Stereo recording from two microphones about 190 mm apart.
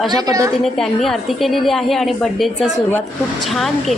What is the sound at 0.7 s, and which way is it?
A woman's voice, centre (ahead or behind).